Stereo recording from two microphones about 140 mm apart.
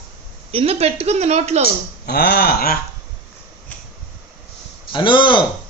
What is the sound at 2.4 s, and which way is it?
Speech, 90° left.